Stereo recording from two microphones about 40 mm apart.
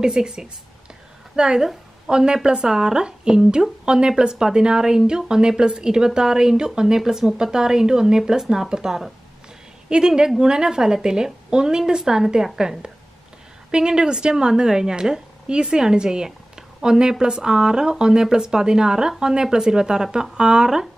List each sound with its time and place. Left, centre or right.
0.0 s speech: centre